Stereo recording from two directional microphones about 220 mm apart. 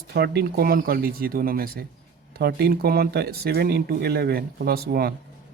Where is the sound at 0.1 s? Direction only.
45° right (ahead or behind).